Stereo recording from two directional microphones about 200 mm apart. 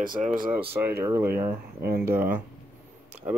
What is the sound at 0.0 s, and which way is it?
Speech, 45° right (ahead or behind).